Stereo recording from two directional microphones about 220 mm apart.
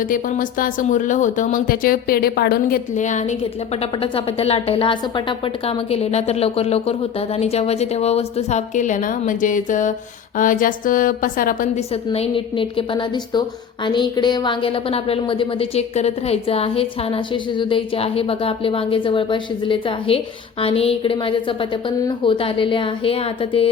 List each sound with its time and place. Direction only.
0.0 s a woman's voice: 40° left (ahead or behind)
12.1 s a woman's voice: 25° left (ahead or behind)